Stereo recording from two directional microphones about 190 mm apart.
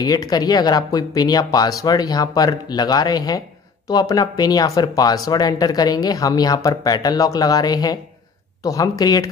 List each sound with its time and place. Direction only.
0.0 s speech: 20° left (ahead or behind)